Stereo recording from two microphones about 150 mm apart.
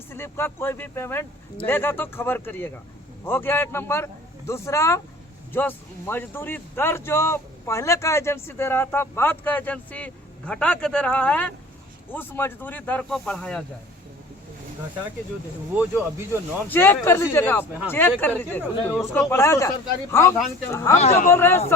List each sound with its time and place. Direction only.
0.1 s speech: 15° left (ahead or behind)
15.7 s speech: 10° right (ahead or behind)
16.6 s a man's voice: 15° left (ahead or behind)
21.0 s speech: 45° left (ahead or behind)
21.2 s speech: 15° left (ahead or behind)